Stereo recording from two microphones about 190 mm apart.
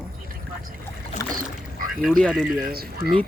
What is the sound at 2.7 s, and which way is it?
Speech, 55° right (ahead or behind).